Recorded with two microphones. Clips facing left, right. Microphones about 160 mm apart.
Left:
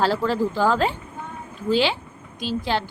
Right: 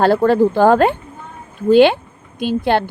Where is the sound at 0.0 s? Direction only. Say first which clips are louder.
Right 9 dB; 55° right (ahead or behind).